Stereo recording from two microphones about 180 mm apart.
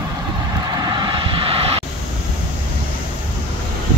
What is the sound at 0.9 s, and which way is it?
Vehicle, 25° right (ahead or behind).